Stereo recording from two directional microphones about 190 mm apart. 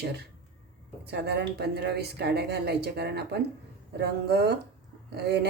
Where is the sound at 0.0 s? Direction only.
60° right (ahead or behind).